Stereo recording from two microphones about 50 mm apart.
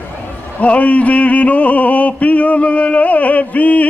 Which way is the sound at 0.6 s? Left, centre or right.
Left.